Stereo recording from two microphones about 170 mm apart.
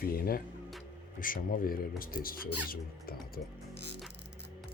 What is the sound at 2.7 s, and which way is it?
Music, 60° left (ahead or behind).